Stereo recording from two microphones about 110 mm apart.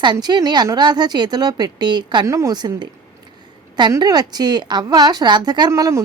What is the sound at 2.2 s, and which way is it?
Speech, 30° right (ahead or behind).